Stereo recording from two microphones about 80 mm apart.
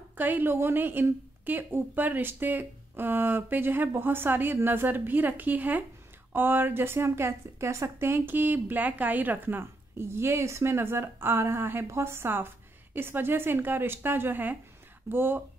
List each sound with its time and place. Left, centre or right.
0.2 s a woman's voice: right